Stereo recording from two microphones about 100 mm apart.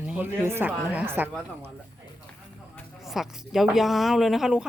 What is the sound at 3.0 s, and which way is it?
Speech, 5° right (ahead or behind).